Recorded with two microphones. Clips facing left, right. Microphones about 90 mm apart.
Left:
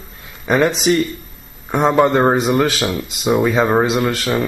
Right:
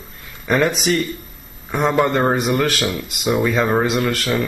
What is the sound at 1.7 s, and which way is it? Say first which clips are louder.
Speech: left 4 dB; 20° left (ahead or behind).